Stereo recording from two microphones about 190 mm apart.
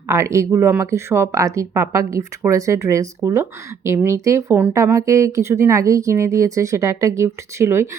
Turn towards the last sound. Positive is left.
turn(degrees=-15)  # may be behind; listen again after turning